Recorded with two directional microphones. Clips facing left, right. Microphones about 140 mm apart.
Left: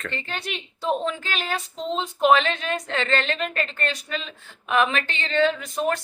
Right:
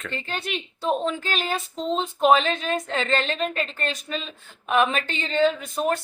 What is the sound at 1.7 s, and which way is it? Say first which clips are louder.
Speech: right 2 dB; centre (ahead or behind).